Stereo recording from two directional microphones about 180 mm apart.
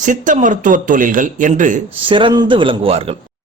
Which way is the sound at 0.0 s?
45° right (ahead or behind).